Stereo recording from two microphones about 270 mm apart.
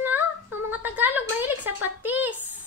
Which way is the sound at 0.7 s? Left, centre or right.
Centre.